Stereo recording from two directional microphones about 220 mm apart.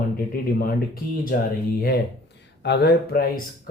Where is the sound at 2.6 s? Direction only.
50° left (ahead or behind).